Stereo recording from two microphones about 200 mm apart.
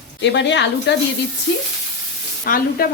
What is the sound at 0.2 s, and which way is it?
Speech, 60° left (ahead or behind).